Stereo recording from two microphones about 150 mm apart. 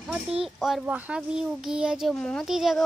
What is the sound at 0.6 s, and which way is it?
A child's voice, centre (ahead or behind).